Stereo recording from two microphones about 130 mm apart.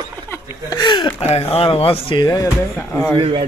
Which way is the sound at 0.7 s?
35° left (ahead or behind).